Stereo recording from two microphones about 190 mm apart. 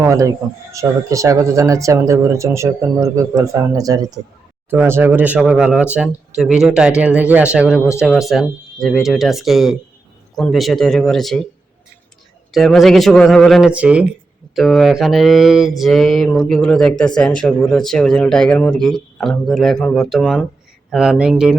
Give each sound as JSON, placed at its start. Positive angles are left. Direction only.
{"t": 0.0, "sound": "speech", "side_deg": -15}
{"t": 7.8, "sound": "speech", "side_deg": 15}
{"t": 8.3, "sound": "speech", "side_deg": 0}
{"t": 12.5, "sound": "speech", "side_deg": 0}